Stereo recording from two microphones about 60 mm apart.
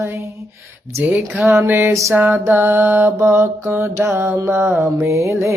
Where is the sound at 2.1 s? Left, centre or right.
Right.